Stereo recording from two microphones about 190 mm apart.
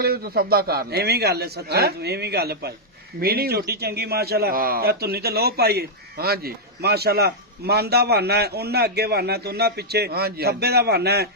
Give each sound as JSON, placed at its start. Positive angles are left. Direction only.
{"t": 0.0, "sound": "a man's voice", "side_deg": -55}